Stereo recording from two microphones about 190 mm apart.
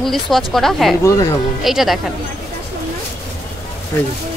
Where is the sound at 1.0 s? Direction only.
15° left (ahead or behind).